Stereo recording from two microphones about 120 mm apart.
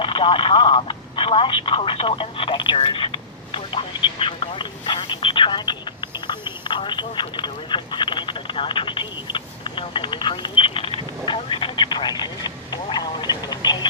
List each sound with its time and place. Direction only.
0.0 s telephone: 45° left (ahead or behind)